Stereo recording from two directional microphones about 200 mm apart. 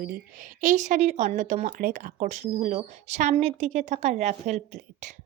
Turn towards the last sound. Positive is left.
turn(degrees=-35)  # may be behind; listen again after turning